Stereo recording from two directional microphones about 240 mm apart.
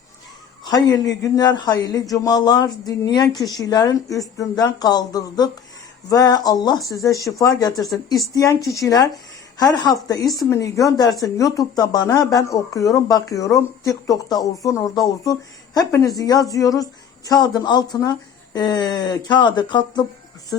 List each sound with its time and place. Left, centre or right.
0.6 s a man's voice: centre